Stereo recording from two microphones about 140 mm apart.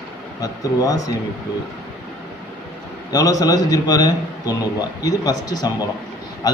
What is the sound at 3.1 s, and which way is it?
A man's voice, 25° left (ahead or behind).